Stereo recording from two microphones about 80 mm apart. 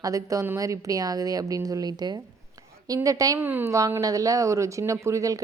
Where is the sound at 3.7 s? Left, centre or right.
Right.